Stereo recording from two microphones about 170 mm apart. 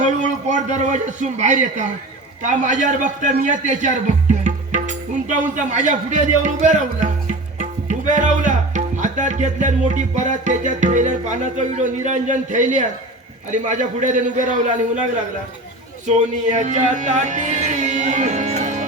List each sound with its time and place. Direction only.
0.0 s a man's voice: 45° right (ahead or behind)
4.3 s music: 45° right (ahead or behind)
5.5 s a man's voice: 45° right (ahead or behind)
16.0 s speech: 45° right (ahead or behind)